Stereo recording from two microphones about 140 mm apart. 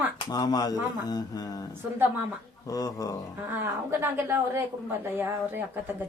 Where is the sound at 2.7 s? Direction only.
25° left (ahead or behind).